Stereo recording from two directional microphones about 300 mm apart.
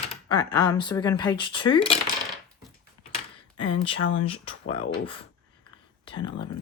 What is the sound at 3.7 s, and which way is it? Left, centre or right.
Speech, centre.